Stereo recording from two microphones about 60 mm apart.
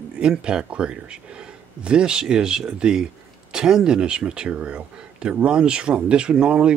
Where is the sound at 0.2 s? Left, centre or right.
Centre.